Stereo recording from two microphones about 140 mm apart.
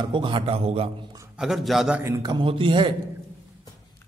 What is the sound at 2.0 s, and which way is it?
Speech, 20° right (ahead or behind).